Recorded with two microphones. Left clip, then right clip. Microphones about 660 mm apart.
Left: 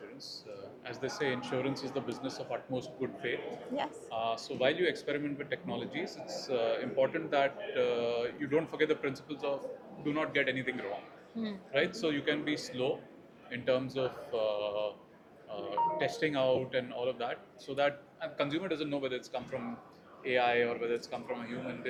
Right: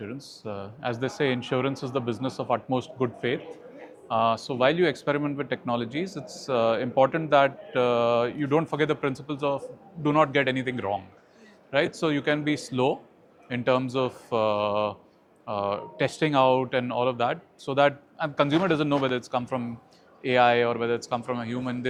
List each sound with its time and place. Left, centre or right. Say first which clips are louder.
0.8 s speech: right 9 dB; right